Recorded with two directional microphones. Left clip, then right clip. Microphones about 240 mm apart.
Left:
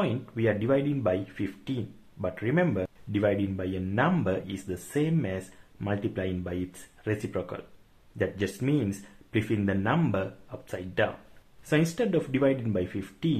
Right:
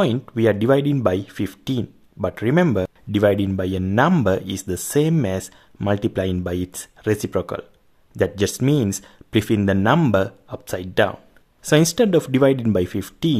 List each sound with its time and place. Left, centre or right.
0.0 s speech: right